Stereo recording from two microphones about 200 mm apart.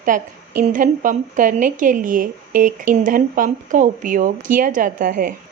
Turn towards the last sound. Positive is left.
turn(degrees=-45)  # may be behind; listen again after turning